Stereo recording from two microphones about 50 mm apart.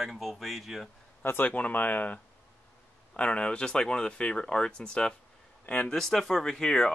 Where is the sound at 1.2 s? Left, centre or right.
Left.